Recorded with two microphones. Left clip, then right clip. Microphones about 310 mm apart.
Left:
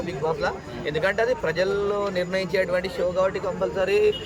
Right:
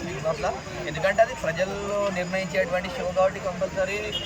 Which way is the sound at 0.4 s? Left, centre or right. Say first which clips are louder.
Left 1 dB; centre.